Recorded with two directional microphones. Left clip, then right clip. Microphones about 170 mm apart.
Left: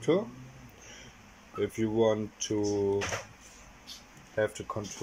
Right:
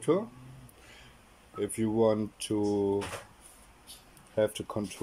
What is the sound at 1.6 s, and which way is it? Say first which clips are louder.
Speech: even; 10° right (ahead or behind).